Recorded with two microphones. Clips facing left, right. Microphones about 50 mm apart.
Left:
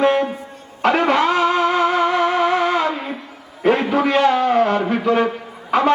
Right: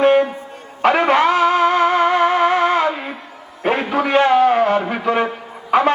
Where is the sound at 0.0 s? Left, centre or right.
Centre.